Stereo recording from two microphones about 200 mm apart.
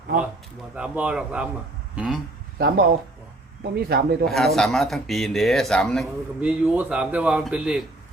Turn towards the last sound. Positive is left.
turn(degrees=-5)  # may be behind; listen again after turning